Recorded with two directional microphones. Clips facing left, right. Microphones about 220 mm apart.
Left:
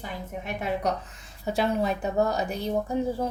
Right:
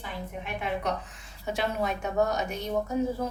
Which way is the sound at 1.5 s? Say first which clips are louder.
Left 4 dB; 35° left (ahead or behind).